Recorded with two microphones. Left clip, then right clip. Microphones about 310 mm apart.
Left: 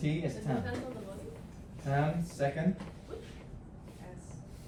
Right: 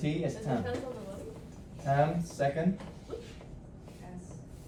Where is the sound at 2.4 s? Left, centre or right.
Centre.